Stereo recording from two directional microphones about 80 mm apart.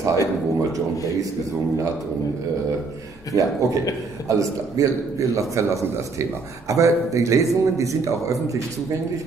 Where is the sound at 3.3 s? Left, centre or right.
Right.